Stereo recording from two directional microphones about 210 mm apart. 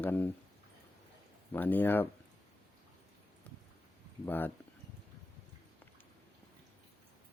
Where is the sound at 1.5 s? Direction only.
10° left (ahead or behind).